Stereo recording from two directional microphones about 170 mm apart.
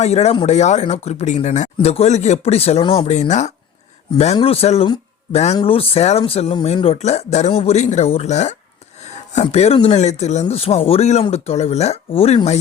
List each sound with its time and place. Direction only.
0.0 s speech: 40° left (ahead or behind)